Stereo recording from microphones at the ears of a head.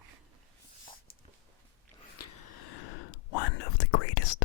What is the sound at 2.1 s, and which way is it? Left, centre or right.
Whispering, left.